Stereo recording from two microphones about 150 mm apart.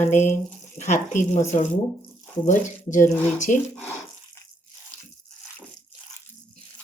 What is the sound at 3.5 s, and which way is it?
Speech, 60° left (ahead or behind).